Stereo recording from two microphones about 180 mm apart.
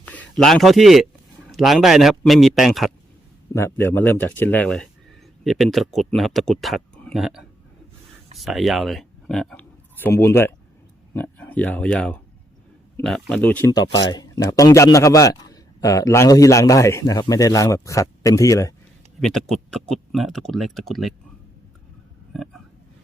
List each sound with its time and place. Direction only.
0.0 s speech: 10° left (ahead or behind)
3.5 s speech: 15° left (ahead or behind)
13.7 s speech: 20° left (ahead or behind)
19.2 s speech: centre (ahead or behind)
22.3 s speech: centre (ahead or behind)